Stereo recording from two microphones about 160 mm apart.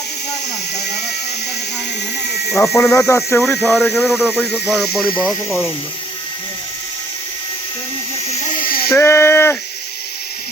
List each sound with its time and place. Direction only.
2.5 s speech: centre (ahead or behind)
2.7 s speech: 20° left (ahead or behind)
3.4 s speech: centre (ahead or behind)
4.3 s speech: 10° right (ahead or behind)
8.6 s a sound: 70° left (ahead or behind)
9.0 s speech: 15° left (ahead or behind)